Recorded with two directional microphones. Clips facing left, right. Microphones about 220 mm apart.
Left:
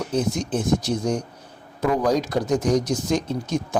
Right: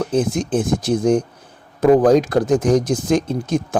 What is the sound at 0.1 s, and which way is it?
A man's voice, 50° right (ahead or behind).